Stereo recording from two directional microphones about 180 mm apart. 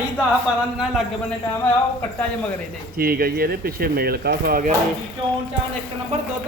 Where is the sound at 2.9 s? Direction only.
55° right (ahead or behind).